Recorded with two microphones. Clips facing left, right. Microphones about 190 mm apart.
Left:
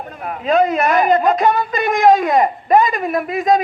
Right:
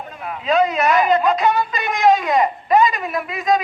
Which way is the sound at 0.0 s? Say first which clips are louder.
Left 3 dB; 45° left (ahead or behind).